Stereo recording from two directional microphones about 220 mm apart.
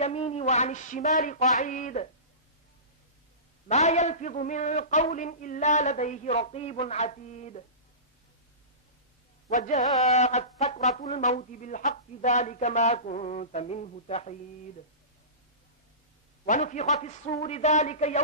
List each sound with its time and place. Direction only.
0.0 s a sound: 30° left (ahead or behind)
3.6 s speech: 30° left (ahead or behind)
9.5 s speech: 35° left (ahead or behind)
16.4 s speech: 35° left (ahead or behind)